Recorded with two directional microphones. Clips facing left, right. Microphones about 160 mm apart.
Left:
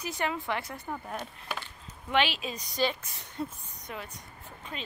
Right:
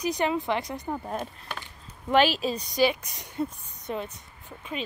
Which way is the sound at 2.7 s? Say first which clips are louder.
Right 5 dB; 15° right (ahead or behind).